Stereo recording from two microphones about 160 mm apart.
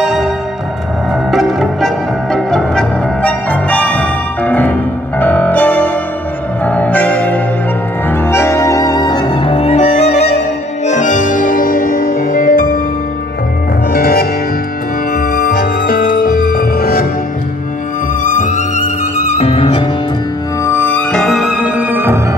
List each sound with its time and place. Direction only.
0.0 s music: 5° right (ahead or behind)
1.3 s music: centre (ahead or behind); by 12.8 s 65° left (ahead or behind)
13.9 s music: 70° left (ahead or behind)
18.2 s music: 55° left (ahead or behind); by 19.8 s 35° left (ahead or behind)
20.6 s music: 15° left (ahead or behind); by 22.2 s 15° right (ahead or behind)